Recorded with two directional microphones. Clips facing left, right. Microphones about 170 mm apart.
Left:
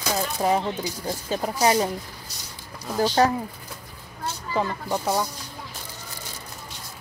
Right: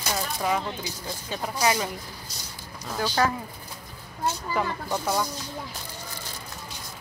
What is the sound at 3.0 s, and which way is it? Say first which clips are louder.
Speech: left 5 dB; 30° left (ahead or behind).